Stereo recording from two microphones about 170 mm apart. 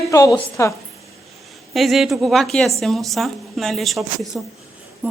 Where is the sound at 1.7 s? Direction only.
Centre (ahead or behind).